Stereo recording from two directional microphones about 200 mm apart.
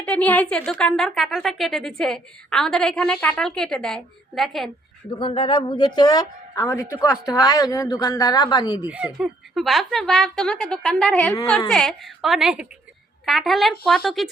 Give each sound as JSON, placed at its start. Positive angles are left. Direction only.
{"t": 0.0, "sound": "a woman's voice", "side_deg": 5}
{"t": 5.1, "sound": "speech", "side_deg": 25}
{"t": 8.9, "sound": "a woman's voice", "side_deg": -5}